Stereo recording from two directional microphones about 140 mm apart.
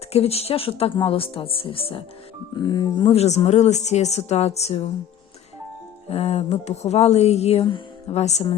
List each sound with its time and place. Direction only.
0.1 s speech: 45° left (ahead or behind)
2.6 s speech: 30° left (ahead or behind); by 4.9 s 50° left (ahead or behind)
6.1 s speech: 45° left (ahead or behind)